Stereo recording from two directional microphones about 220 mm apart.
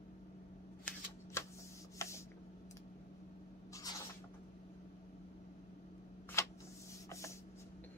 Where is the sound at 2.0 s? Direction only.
15° left (ahead or behind).